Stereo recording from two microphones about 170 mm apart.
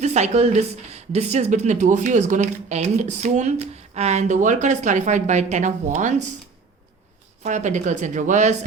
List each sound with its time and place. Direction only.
0.0 s a woman's voice: 40° right (ahead or behind)
7.4 s a woman's voice: 45° right (ahead or behind)